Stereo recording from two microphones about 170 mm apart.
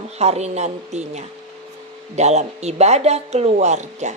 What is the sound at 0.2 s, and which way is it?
Speech, 40° right (ahead or behind).